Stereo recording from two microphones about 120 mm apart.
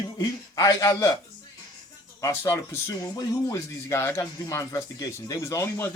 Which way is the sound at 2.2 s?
25° left (ahead or behind).